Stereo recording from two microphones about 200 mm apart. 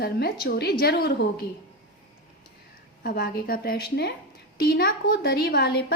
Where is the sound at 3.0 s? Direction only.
50° left (ahead or behind).